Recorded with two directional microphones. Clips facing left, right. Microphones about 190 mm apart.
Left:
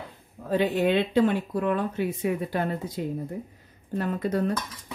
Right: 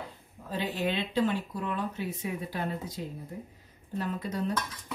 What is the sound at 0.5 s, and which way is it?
Speech, 60° left (ahead or behind).